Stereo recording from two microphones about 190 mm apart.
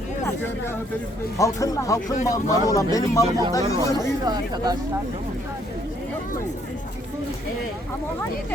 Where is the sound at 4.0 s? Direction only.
20° right (ahead or behind).